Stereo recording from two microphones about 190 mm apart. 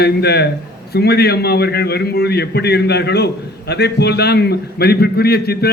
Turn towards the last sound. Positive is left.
turn(degrees=55)  # may be behind; listen again after turning